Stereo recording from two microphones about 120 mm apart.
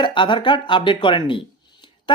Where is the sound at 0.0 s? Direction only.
40° left (ahead or behind).